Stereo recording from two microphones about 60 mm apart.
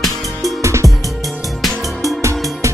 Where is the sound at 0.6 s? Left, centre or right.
Right.